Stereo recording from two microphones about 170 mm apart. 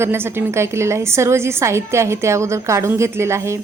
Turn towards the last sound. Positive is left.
turn(degrees=-15)  # may be behind; listen again after turning